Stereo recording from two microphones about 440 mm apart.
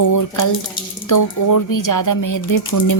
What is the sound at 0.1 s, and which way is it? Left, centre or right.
Speech, left.